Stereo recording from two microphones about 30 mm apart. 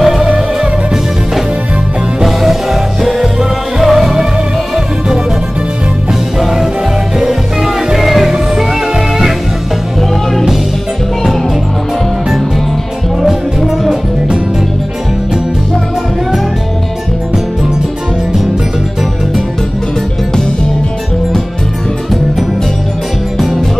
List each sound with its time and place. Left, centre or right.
0.0 s music: centre
2.2 s music: centre
6.4 s music: centre
13.7 s music: centre